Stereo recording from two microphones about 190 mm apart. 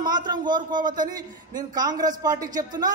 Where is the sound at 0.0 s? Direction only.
20° right (ahead or behind).